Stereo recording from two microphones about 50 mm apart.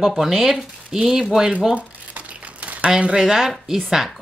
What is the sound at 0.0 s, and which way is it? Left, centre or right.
Speech, centre.